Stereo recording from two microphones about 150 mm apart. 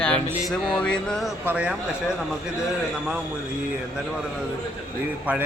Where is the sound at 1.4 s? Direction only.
10° right (ahead or behind).